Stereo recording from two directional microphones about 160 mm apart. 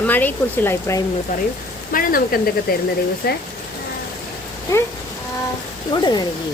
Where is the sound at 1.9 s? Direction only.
60° left (ahead or behind).